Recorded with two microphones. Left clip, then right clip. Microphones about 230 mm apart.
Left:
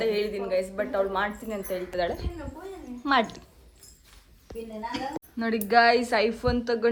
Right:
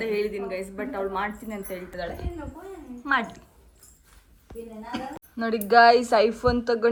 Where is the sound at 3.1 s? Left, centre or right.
Centre.